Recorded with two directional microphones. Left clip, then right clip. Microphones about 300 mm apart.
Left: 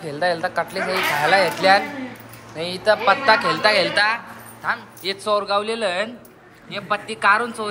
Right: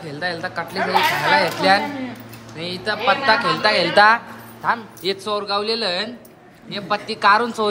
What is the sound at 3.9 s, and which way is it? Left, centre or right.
Speech, right.